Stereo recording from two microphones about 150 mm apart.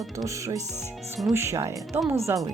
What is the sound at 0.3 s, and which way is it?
Speech, 20° right (ahead or behind).